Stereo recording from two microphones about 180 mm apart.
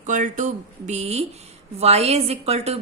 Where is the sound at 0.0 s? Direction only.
45° right (ahead or behind).